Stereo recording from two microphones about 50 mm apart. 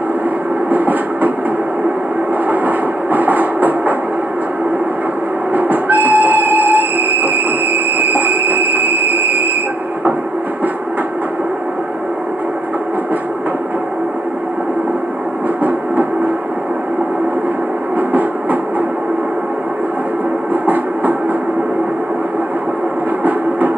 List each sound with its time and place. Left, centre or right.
0.7 s train: right
2.5 s train: right
5.5 s train: right
17.9 s train: right
20.6 s a sound: right